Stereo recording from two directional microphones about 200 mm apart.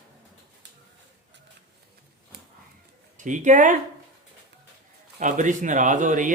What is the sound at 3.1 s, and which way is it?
Speech, 40° right (ahead or behind).